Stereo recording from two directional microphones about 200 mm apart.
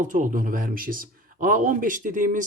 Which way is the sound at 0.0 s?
40° right (ahead or behind).